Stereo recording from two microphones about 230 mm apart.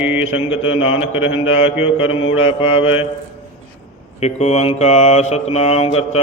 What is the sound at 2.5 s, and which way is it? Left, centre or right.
Mantra, left.